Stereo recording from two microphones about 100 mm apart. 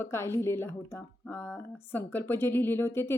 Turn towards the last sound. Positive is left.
turn(degrees=25)  # may be behind; listen again after turning